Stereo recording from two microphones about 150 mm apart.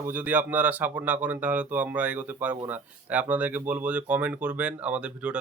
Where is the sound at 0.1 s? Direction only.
10° right (ahead or behind).